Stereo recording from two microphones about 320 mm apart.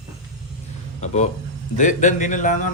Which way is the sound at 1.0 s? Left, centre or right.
Left.